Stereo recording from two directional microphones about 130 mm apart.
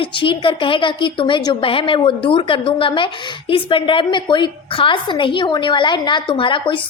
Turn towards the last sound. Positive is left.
turn(degrees=40)  # may be behind; listen again after turning